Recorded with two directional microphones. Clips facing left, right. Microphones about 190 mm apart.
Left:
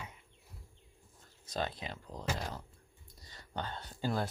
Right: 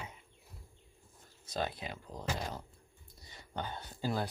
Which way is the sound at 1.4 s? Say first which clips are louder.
Even; 10° right (ahead or behind).